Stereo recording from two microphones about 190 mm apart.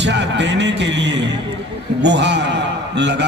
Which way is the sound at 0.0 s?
65° right (ahead or behind).